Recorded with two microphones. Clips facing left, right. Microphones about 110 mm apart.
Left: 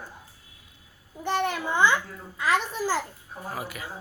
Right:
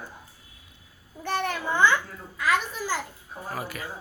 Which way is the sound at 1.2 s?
20° left (ahead or behind).